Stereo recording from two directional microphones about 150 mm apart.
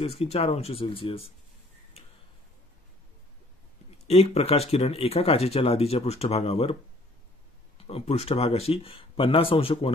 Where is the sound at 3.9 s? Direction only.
45° left (ahead or behind).